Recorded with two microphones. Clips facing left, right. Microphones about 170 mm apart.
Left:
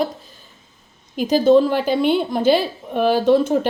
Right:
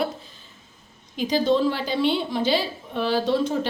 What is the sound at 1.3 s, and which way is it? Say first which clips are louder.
A woman's voice: left 7 dB; 50° left (ahead or behind).